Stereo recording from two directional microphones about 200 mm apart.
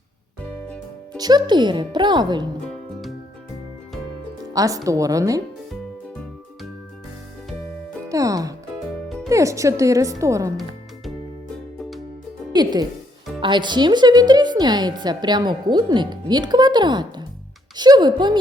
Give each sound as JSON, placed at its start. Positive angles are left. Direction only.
{"t": 1.1, "sound": "a woman's voice", "side_deg": -20}
{"t": 4.5, "sound": "speech", "side_deg": -15}
{"t": 8.1, "sound": "music", "side_deg": -15}
{"t": 9.0, "sound": "music", "side_deg": 0}
{"t": 9.3, "sound": "speech", "side_deg": -15}
{"t": 12.5, "sound": "music", "side_deg": -20}
{"t": 13.4, "sound": "a woman's voice", "side_deg": -25}